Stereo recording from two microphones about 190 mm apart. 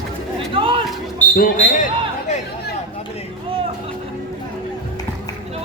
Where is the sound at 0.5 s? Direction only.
25° right (ahead or behind).